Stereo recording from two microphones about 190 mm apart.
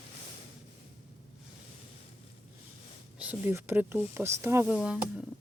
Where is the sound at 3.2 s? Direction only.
10° right (ahead or behind).